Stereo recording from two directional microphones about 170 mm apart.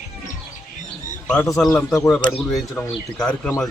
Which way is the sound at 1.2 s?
5° left (ahead or behind).